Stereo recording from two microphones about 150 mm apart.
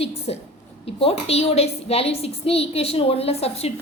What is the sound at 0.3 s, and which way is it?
A woman's voice, 40° left (ahead or behind).